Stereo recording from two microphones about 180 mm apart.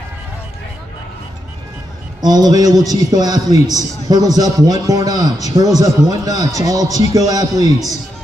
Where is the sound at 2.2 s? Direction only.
20° right (ahead or behind).